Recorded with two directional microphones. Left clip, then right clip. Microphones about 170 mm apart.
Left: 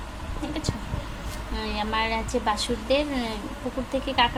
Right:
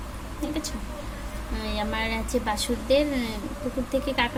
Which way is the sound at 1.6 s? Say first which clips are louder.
Left 2 dB; 15° right (ahead or behind).